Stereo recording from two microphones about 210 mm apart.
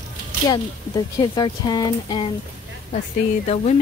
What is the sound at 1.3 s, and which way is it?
Speech, 20° left (ahead or behind).